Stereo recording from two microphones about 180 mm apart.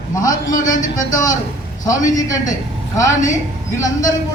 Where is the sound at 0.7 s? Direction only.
45° left (ahead or behind).